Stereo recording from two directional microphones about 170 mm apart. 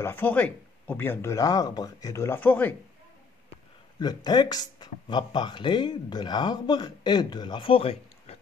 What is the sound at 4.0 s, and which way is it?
Speech, 25° left (ahead or behind).